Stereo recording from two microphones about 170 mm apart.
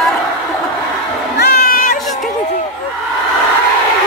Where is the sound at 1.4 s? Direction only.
60° left (ahead or behind).